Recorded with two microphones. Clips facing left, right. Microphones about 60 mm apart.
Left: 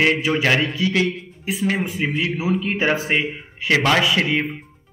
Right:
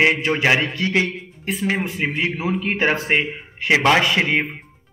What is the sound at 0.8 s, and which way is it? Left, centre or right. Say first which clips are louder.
Speech: even; right.